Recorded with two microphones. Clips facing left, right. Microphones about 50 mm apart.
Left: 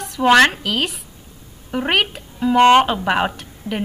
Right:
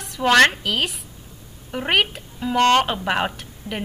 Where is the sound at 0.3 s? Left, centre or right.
Centre.